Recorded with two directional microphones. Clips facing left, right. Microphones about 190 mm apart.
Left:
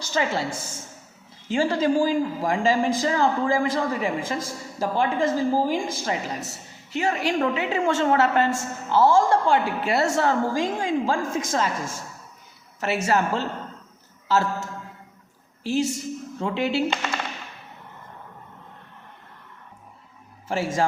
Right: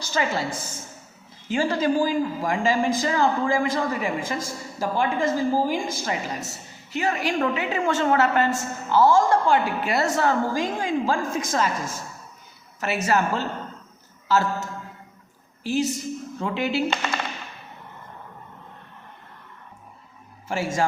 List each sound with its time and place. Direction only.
0.0 s a woman's voice: 25° left (ahead or behind)
12.8 s a woman's voice: 30° left (ahead or behind)
20.5 s speech: 35° left (ahead or behind)